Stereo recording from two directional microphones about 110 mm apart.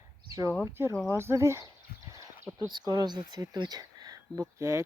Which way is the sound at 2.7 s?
40° right (ahead or behind).